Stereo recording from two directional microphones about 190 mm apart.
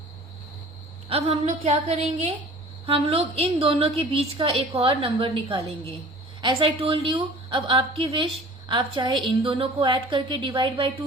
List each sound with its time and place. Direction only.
1.0 s a woman's voice: 30° right (ahead or behind)